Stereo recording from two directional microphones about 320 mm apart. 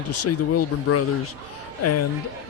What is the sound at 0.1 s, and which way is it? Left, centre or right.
A man's voice, left.